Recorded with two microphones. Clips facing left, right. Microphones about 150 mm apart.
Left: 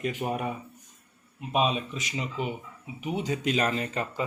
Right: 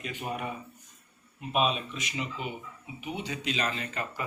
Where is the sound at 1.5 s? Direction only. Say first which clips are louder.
Left 2 dB; 35° left (ahead or behind).